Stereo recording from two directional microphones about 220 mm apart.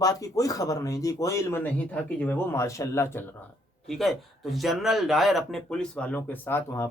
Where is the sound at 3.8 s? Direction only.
Centre (ahead or behind).